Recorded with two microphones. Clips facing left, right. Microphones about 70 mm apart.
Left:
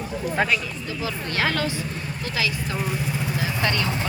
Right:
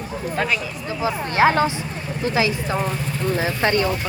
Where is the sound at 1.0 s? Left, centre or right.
Right.